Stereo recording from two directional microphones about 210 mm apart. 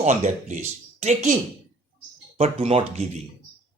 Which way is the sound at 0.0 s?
35° right (ahead or behind).